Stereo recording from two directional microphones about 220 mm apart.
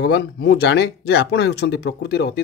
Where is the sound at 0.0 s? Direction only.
50° left (ahead or behind).